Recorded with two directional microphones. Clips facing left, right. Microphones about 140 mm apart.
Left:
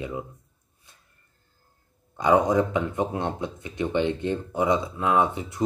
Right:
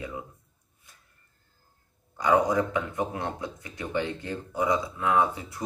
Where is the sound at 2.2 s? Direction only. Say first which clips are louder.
Left 3 dB; 20° left (ahead or behind).